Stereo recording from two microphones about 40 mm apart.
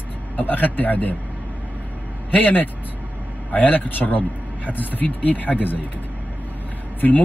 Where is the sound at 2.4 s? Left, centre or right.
Left.